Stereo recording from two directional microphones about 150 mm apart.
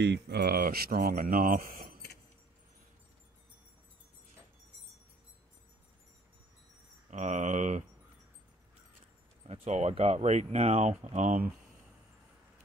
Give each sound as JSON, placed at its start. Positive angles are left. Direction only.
{"t": 0.3, "sound": "speech", "side_deg": -90}
{"t": 7.1, "sound": "speech", "side_deg": -50}
{"t": 9.5, "sound": "speech", "side_deg": -45}